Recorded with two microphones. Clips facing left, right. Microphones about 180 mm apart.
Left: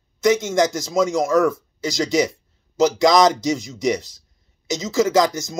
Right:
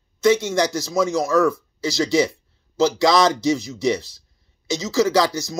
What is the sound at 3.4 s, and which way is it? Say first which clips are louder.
Speech: right 2 dB; 45° left (ahead or behind).